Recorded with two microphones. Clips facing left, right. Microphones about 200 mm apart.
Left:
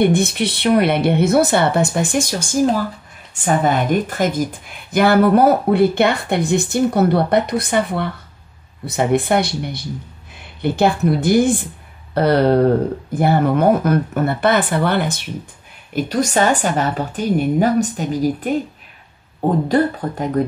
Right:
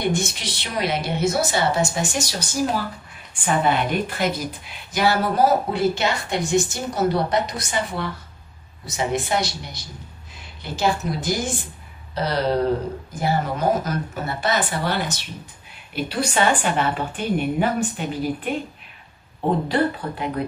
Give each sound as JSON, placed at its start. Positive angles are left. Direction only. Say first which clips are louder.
{"t": 0.0, "sound": "a woman's voice", "louder": "left 9 dB", "side_deg": 60}
{"t": 15.9, "sound": "speech", "louder": "left 6 dB", "side_deg": 45}
{"t": 19.7, "sound": "speech", "louder": "left 5 dB", "side_deg": 45}